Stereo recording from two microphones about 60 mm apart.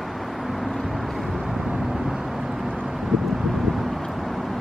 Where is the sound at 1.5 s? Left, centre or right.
Centre.